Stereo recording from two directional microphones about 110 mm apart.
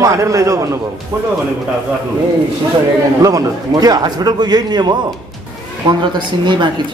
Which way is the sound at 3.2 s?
35° right (ahead or behind).